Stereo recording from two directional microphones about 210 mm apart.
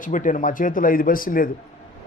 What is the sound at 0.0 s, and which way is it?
A man's voice, 40° left (ahead or behind).